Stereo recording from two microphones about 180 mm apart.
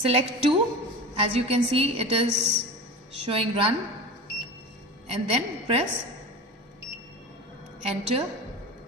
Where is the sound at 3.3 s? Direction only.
35° right (ahead or behind).